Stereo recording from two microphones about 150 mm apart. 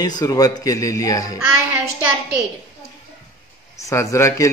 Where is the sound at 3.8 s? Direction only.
20° left (ahead or behind).